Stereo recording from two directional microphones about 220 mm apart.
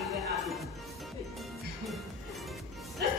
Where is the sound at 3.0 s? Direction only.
45° right (ahead or behind).